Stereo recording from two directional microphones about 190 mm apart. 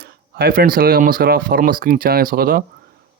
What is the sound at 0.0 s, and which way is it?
Speech, 55° right (ahead or behind).